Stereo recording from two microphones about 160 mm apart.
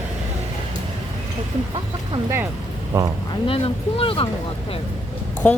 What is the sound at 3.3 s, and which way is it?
Speech, 35° left (ahead or behind).